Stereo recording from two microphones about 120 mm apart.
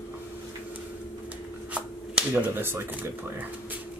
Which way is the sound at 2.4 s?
20° right (ahead or behind).